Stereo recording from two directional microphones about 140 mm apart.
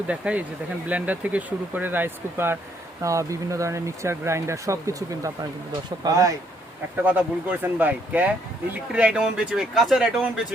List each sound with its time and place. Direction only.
0.1 s speech: 10° right (ahead or behind); by 6.3 s 25° right (ahead or behind)
7.0 s speech: 10° right (ahead or behind)